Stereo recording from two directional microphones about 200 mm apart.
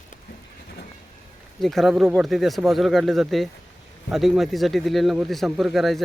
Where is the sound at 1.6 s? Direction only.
Centre (ahead or behind).